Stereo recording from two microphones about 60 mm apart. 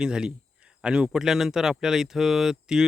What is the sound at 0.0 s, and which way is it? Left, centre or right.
Speech, centre.